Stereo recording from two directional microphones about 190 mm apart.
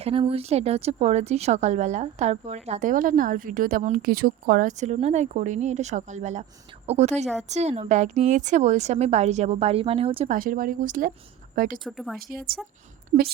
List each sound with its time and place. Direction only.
0.0 s speech: 30° right (ahead or behind)
10.2 s speech: 45° right (ahead or behind)
11.9 s speech: centre (ahead or behind)
13.1 s speech: 45° right (ahead or behind)